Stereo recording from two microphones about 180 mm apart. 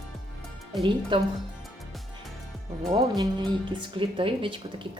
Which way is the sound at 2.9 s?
20° right (ahead or behind).